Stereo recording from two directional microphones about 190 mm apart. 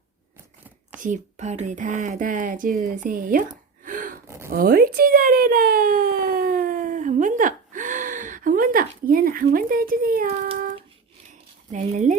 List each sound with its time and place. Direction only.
0.9 s speech: 40° right (ahead or behind)
3.8 s gasp: 45° right (ahead or behind)
4.3 s a sound: 15° right (ahead or behind)
4.5 s speech: 50° right (ahead or behind)
11.7 s speech: 40° right (ahead or behind)